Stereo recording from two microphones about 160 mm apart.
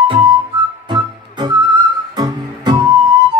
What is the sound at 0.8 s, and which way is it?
Music, 30° right (ahead or behind).